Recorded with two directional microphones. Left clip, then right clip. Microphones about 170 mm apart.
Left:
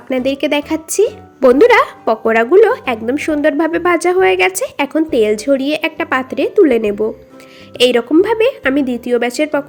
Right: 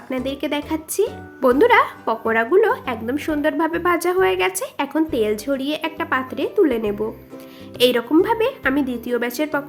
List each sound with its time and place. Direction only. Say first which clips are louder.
0.1 s speech: left 9 dB; 30° left (ahead or behind)